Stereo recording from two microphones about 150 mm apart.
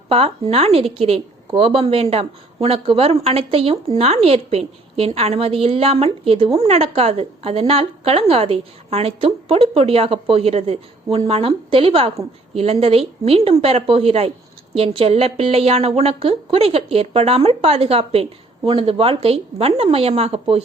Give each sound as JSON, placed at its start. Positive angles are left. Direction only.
{"t": 0.1, "sound": "a woman's voice", "side_deg": -40}